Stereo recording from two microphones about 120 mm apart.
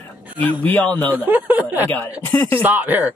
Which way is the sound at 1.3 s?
15° right (ahead or behind).